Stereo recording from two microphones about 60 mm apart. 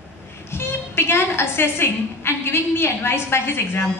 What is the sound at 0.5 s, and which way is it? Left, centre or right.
A woman's voice, left.